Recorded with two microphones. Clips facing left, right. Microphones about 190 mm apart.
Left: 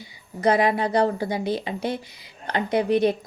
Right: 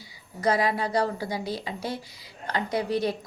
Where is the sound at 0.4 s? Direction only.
20° left (ahead or behind).